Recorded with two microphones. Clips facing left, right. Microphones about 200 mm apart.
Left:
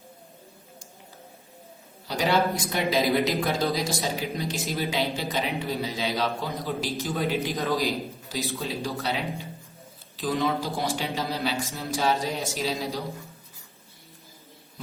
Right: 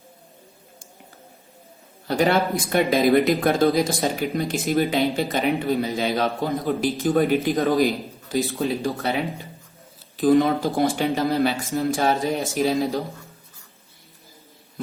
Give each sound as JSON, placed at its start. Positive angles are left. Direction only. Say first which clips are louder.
{"t": 2.0, "sound": "speech", "louder": "right 4 dB", "side_deg": -55}